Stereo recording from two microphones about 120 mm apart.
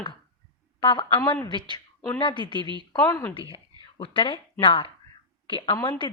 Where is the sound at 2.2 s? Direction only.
40° left (ahead or behind).